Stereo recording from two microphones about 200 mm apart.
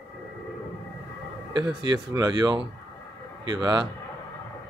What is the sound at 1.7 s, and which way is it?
Speech, 20° right (ahead or behind).